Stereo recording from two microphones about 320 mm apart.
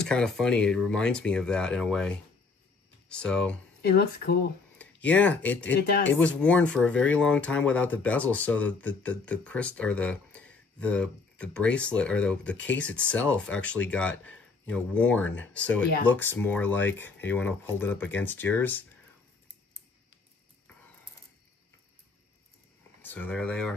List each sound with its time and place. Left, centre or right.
0.0 s speech: centre
3.8 s speech: left
4.7 s speech: centre
5.8 s speech: left
6.2 s speech: centre
23.0 s speech: centre